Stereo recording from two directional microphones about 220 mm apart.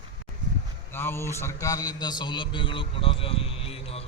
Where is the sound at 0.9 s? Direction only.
10° left (ahead or behind).